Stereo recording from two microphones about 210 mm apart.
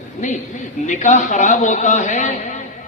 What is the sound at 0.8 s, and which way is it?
A man's voice, 35° left (ahead or behind).